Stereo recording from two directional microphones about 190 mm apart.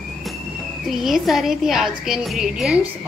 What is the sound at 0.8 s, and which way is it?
A woman's voice, centre (ahead or behind).